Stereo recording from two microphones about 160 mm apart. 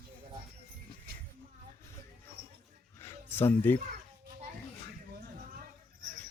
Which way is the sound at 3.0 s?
15° left (ahead or behind).